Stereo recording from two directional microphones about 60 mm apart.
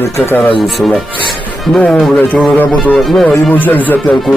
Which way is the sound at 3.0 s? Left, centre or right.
Centre.